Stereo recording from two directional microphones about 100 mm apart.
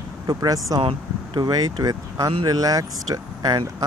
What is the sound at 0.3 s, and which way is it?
Speech, 40° right (ahead or behind).